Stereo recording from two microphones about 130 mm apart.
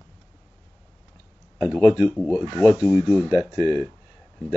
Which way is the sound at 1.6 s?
Centre (ahead or behind).